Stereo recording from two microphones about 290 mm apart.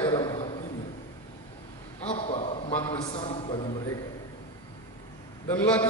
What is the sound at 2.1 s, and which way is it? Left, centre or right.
A man's voice, left.